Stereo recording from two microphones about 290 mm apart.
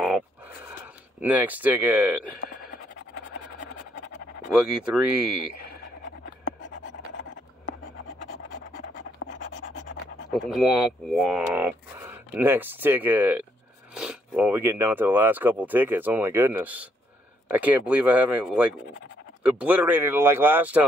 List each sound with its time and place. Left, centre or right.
1.2 s speech: centre
4.5 s speech: centre
6.0 s scratch: left
10.3 s speech: centre